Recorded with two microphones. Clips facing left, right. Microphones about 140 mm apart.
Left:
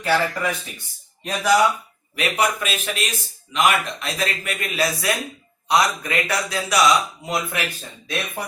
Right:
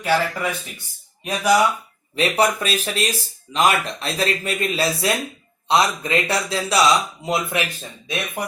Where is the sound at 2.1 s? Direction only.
30° right (ahead or behind).